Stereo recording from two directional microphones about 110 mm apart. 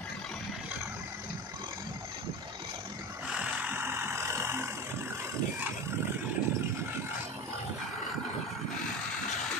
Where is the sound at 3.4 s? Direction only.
15° right (ahead or behind).